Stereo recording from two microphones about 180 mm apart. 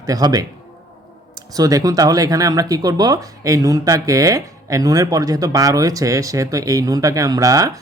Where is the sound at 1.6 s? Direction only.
20° right (ahead or behind).